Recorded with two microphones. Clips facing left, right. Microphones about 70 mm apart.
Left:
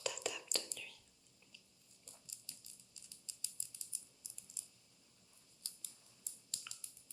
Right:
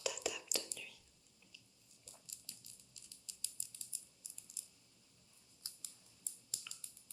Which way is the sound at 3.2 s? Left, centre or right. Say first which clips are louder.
Even; left.